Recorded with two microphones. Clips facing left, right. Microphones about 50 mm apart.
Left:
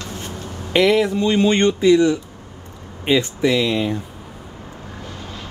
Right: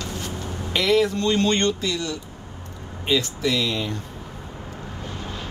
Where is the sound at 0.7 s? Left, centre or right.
Left.